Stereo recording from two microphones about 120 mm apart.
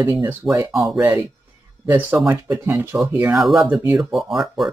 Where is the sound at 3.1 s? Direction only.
15° right (ahead or behind).